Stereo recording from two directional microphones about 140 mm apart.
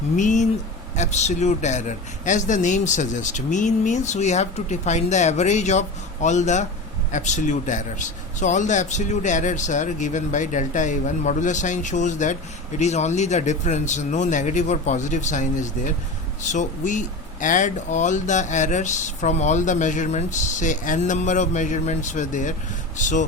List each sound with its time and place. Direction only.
0.2 s speech: 60° left (ahead or behind)